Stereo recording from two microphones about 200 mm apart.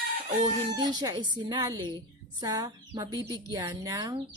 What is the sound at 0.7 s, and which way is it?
Speech, 20° right (ahead or behind).